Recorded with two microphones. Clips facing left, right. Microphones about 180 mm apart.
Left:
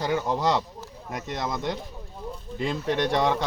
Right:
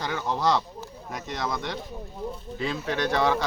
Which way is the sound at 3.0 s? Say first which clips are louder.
Even; 20° left (ahead or behind).